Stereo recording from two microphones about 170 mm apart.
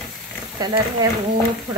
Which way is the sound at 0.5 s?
20° right (ahead or behind).